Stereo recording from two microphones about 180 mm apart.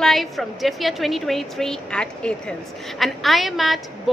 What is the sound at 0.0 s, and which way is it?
A woman's voice, centre (ahead or behind).